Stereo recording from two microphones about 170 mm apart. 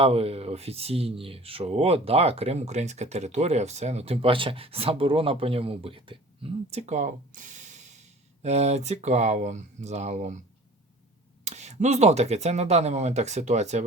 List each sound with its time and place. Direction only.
0.0 s speech: 35° right (ahead or behind)
11.4 s speech: 40° right (ahead or behind)